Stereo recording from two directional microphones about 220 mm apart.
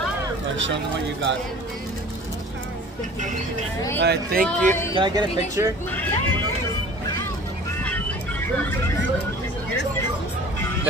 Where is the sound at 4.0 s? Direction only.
50° right (ahead or behind).